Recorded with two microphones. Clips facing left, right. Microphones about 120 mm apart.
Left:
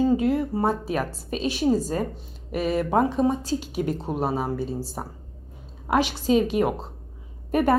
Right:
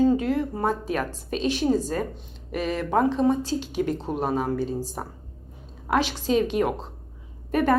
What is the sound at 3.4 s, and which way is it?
Speech, 40° left (ahead or behind).